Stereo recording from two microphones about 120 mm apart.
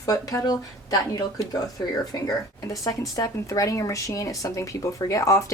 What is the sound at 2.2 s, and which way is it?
Speech, 30° left (ahead or behind).